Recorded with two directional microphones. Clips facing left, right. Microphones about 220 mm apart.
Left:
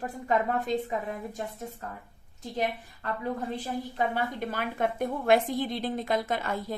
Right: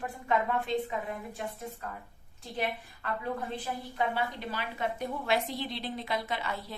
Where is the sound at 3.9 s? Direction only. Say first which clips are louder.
Left 1 dB; 45° left (ahead or behind).